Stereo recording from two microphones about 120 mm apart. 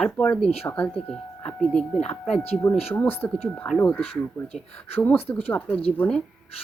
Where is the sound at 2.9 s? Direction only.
15° left (ahead or behind).